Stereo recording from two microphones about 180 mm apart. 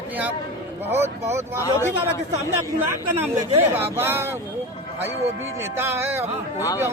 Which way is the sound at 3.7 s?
10° right (ahead or behind).